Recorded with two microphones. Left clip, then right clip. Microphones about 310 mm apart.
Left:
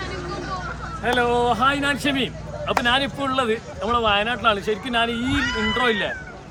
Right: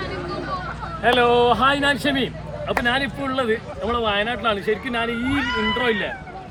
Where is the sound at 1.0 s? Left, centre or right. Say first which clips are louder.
Right 4 dB; centre.